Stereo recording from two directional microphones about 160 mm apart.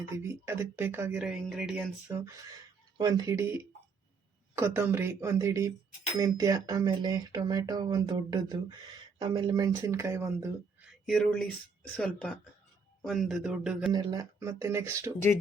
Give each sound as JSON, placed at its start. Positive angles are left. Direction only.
{"t": 0.2, "sound": "speech", "side_deg": -15}
{"t": 1.2, "sound": "speech", "side_deg": -5}
{"t": 3.0, "sound": "speech", "side_deg": -25}
{"t": 11.0, "sound": "speech", "side_deg": 0}
{"t": 13.9, "sound": "speech", "side_deg": -25}